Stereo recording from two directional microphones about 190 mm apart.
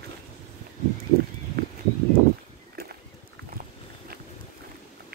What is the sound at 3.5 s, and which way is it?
Walk, 50° right (ahead or behind).